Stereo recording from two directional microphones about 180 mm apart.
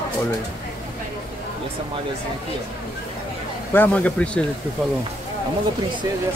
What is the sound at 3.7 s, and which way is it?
Speech, 10° left (ahead or behind).